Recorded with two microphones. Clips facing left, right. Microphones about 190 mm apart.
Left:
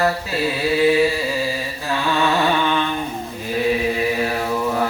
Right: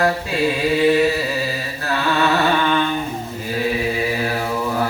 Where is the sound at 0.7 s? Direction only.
10° left (ahead or behind).